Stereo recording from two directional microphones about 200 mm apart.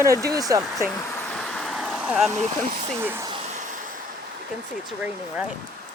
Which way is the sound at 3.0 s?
10° right (ahead or behind).